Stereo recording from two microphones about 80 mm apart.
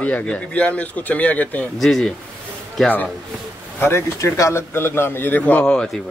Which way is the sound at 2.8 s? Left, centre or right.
Centre.